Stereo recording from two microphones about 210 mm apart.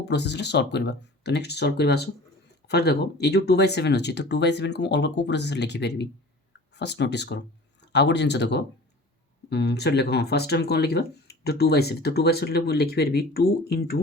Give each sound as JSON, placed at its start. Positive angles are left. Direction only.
{"t": 0.0, "sound": "speech", "side_deg": 55}